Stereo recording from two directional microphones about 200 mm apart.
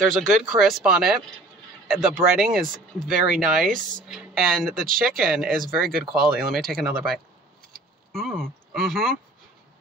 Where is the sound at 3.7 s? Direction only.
40° right (ahead or behind).